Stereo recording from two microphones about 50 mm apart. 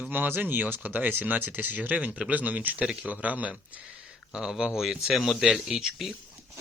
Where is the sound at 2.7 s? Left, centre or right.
Centre.